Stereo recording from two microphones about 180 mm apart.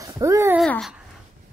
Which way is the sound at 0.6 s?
Centre (ahead or behind).